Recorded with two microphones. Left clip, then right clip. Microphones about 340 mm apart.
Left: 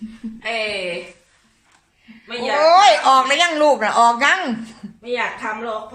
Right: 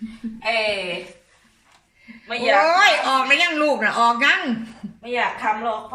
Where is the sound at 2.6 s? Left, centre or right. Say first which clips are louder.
Left 5 dB; centre.